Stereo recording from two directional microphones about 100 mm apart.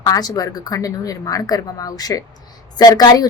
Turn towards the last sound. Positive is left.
turn(degrees=40)  # may be behind; listen again after turning